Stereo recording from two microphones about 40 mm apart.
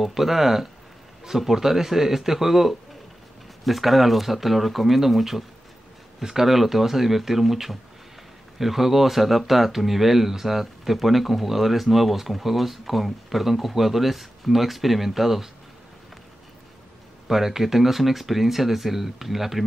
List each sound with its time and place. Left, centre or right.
0.0 s speech: centre
17.3 s speech: centre